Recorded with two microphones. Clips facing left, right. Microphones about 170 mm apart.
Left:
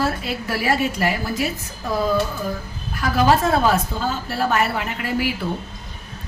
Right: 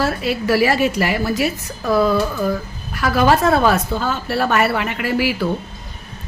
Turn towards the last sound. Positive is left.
turn(degrees=-80)